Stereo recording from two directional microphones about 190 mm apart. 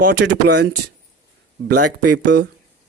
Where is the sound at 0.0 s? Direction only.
55° right (ahead or behind).